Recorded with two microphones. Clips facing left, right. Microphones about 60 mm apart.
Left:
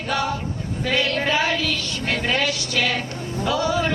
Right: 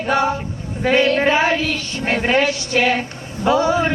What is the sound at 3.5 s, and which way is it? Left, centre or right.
Speech, right.